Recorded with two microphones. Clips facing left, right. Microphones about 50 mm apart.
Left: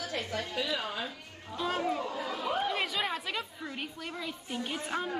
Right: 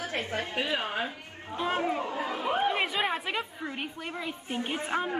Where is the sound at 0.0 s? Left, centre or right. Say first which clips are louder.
Right 3 dB; right.